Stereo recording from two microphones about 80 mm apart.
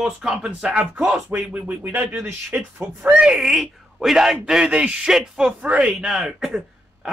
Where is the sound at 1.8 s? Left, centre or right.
Right.